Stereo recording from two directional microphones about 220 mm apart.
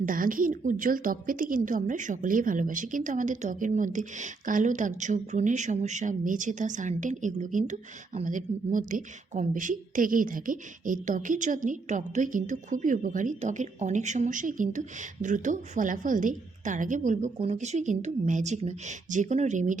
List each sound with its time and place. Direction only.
0.0 s a woman's voice: 40° right (ahead or behind)